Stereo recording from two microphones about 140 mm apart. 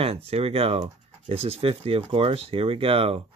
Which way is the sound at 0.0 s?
45° right (ahead or behind).